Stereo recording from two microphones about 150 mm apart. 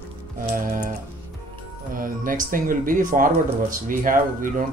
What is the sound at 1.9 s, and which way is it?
Speech, 65° right (ahead or behind).